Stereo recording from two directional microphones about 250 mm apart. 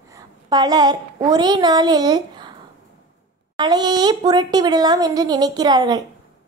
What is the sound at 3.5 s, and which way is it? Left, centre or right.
A woman's voice, centre.